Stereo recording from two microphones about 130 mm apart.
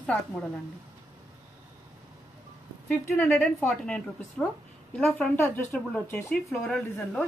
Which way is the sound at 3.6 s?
5° left (ahead or behind).